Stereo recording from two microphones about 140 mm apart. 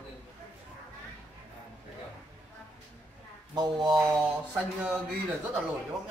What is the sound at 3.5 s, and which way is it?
Speech, 30° right (ahead or behind).